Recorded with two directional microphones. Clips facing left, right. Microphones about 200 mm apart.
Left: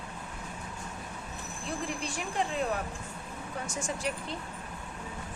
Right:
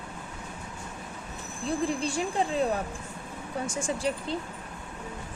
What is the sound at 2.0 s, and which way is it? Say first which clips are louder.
Speech: right 5 dB; 30° right (ahead or behind).